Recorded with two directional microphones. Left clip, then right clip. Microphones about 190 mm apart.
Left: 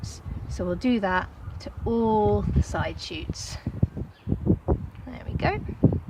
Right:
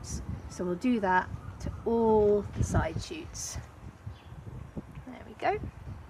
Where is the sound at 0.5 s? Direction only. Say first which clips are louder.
Left 5 dB; 35° left (ahead or behind).